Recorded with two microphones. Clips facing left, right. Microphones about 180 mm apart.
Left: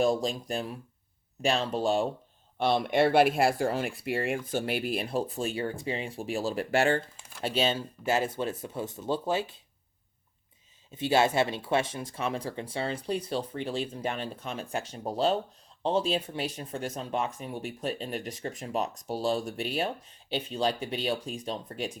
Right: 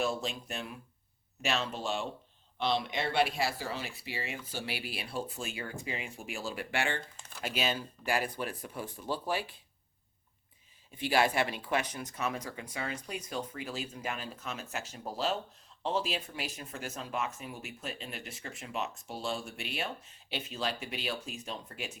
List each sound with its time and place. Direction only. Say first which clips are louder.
0.0 s speech: left 7 dB; 35° left (ahead or behind)
2.6 s speech: left 8 dB; 50° left (ahead or behind)
7.4 s speech: left 6 dB; 30° left (ahead or behind)
10.9 s speech: left 4 dB; 25° left (ahead or behind)